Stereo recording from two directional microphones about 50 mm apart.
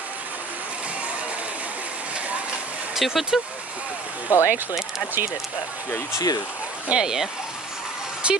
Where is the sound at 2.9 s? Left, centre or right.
Centre.